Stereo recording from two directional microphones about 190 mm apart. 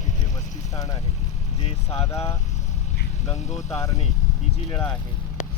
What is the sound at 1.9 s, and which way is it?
Speech, 15° left (ahead or behind).